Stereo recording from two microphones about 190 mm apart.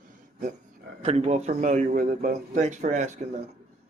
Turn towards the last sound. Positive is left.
turn(degrees=-40)  # may be behind; listen again after turning